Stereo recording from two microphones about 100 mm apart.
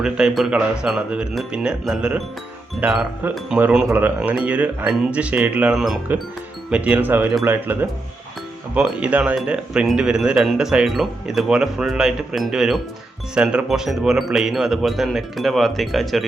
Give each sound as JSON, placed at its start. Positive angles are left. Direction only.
{"t": 0.0, "sound": "speech", "side_deg": -5}